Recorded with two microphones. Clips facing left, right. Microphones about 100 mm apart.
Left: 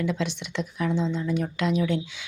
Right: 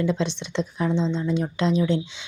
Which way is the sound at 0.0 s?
30° right (ahead or behind).